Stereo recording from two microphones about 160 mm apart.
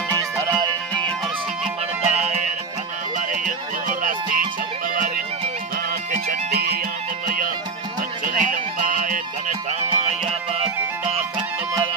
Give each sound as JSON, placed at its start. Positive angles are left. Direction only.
{"t": 0.1, "sound": "music", "side_deg": -25}
{"t": 2.0, "sound": "music", "side_deg": -45}
{"t": 6.1, "sound": "music", "side_deg": -75}
{"t": 7.2, "sound": "music", "side_deg": -55}